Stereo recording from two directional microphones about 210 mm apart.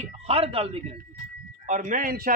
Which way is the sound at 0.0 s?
30° right (ahead or behind).